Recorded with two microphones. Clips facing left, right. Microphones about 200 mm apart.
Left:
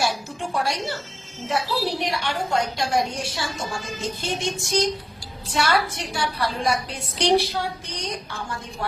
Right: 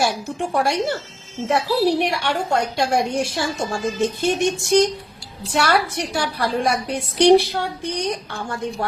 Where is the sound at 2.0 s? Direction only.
65° right (ahead or behind).